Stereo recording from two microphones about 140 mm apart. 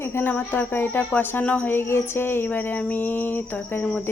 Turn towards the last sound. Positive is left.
turn(degrees=10)  # may be behind; listen again after turning